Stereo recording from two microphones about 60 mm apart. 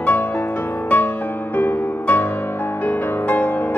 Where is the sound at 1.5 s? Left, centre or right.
Left.